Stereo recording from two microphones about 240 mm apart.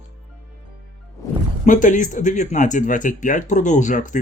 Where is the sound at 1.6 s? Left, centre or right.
Left.